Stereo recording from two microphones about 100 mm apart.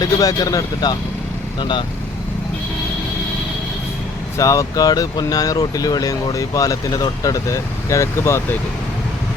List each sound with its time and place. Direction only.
0.0 s speech: 40° left (ahead or behind)
4.4 s speech: 30° left (ahead or behind)